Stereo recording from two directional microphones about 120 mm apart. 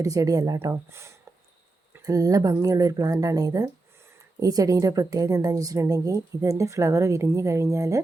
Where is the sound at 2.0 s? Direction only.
30° right (ahead or behind).